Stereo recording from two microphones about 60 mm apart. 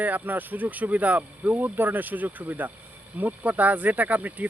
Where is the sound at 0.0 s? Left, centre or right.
Right.